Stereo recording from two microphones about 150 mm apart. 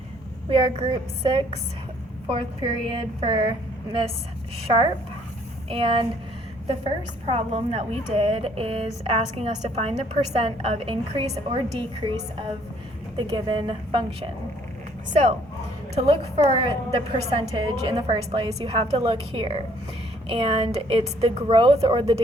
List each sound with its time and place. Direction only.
0.5 s a woman's voice: 35° right (ahead or behind)
5.6 s a woman's voice: 35° right (ahead or behind)
13.1 s a woman's voice: 30° right (ahead or behind)
16.0 s a woman's voice: 40° right (ahead or behind)